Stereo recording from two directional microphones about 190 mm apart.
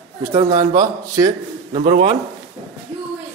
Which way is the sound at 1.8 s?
35° right (ahead or behind).